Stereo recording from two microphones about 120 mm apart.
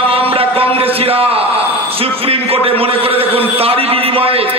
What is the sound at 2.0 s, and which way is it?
A man's voice, 55° right (ahead or behind).